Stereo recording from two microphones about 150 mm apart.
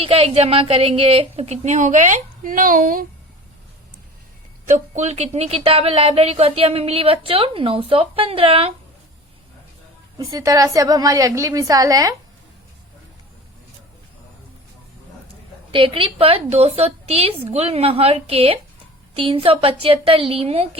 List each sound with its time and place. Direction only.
0.0 s a woman's voice: 40° right (ahead or behind); by 3.1 s 70° right (ahead or behind)
4.7 s speech: 50° right (ahead or behind)
10.2 s a woman's voice: 20° right (ahead or behind)
15.7 s speech: 35° right (ahead or behind)